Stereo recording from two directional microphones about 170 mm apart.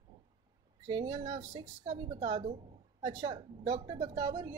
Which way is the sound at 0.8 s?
25° right (ahead or behind).